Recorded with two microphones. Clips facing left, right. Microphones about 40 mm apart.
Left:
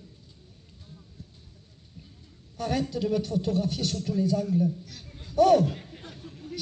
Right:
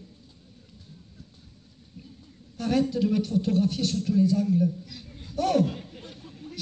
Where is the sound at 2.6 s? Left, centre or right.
Right.